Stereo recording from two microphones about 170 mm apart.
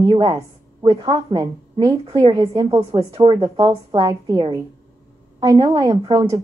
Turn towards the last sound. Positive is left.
turn(degrees=-25)  # may be behind; listen again after turning